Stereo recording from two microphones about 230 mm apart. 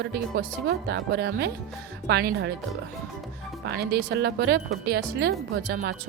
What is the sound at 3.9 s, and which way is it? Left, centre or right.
Speech, right.